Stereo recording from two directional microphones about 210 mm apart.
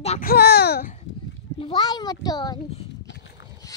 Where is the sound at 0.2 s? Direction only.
45° left (ahead or behind).